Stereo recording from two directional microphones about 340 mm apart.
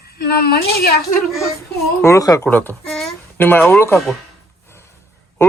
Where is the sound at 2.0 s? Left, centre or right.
Centre.